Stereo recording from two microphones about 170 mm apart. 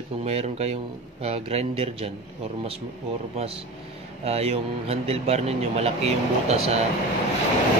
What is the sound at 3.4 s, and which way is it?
Speech, 35° right (ahead or behind).